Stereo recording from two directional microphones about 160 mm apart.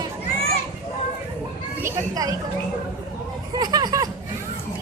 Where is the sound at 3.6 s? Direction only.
25° right (ahead or behind).